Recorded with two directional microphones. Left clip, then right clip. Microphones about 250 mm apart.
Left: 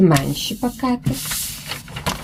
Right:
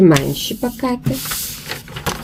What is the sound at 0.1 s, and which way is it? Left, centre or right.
Speech, centre.